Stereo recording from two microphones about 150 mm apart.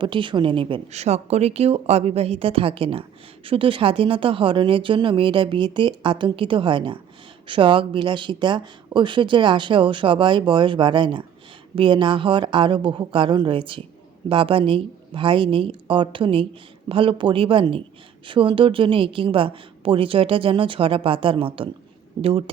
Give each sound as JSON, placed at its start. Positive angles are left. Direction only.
{"t": 0.0, "sound": "speech", "side_deg": -35}
{"t": 0.9, "sound": "a woman's voice", "side_deg": -45}